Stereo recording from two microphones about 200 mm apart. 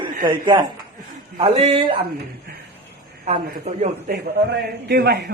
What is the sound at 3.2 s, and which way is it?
Speech, 35° right (ahead or behind).